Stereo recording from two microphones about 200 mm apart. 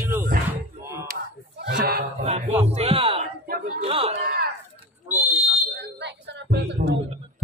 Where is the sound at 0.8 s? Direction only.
15° right (ahead or behind).